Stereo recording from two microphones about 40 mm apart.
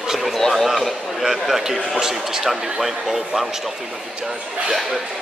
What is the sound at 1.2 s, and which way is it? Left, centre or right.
A man's voice, centre.